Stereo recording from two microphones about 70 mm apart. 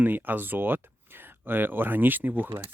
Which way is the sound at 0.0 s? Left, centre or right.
Right.